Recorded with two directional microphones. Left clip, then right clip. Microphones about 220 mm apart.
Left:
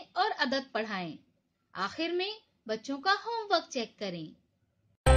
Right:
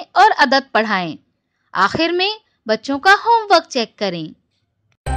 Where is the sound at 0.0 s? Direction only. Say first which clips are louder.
Right 18 dB; 40° right (ahead or behind).